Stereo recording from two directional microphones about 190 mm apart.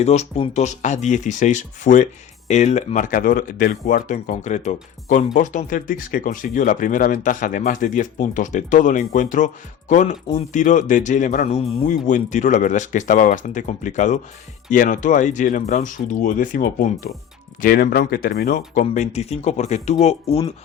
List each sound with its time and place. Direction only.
0.0 s speech: 35° left (ahead or behind)